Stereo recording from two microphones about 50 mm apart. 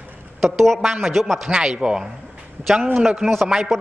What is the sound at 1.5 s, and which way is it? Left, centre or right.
Speech, centre.